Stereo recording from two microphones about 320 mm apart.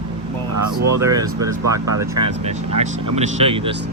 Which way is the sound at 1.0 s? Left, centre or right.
Centre.